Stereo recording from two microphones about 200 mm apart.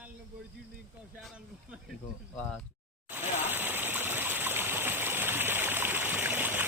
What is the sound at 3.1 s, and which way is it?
Stream, 10° right (ahead or behind).